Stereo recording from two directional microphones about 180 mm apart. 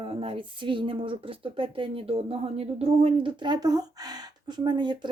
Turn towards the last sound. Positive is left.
turn(degrees=-25)  # may be behind; listen again after turning